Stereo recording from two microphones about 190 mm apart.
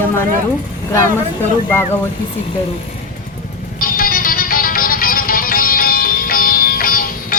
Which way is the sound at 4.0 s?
50° left (ahead or behind).